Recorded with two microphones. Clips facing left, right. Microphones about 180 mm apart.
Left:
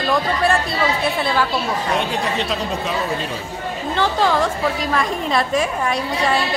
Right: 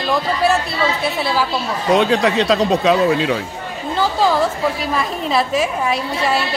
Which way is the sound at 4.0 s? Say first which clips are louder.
Right 2 dB; 5° right (ahead or behind).